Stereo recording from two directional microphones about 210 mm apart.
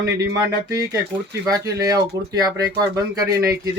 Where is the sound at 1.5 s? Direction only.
15° right (ahead or behind).